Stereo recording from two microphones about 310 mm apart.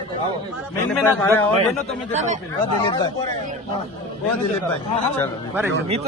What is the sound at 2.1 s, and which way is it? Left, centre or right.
Speech, right.